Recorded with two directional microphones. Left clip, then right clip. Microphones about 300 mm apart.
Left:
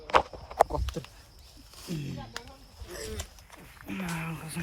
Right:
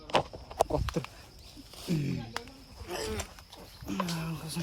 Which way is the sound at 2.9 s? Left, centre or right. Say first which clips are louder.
Right 4 dB; centre.